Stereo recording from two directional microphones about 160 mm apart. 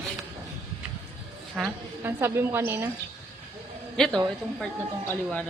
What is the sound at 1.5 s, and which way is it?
A woman's voice, 10° right (ahead or behind).